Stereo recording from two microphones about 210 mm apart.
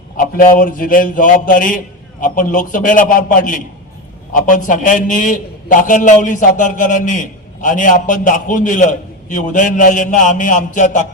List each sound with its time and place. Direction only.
0.2 s a man's voice: 40° left (ahead or behind)